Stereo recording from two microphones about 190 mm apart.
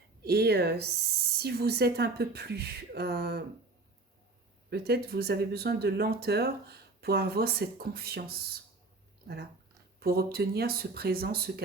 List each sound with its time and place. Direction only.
0.2 s speech: 55° right (ahead or behind)
4.7 s speech: 55° right (ahead or behind)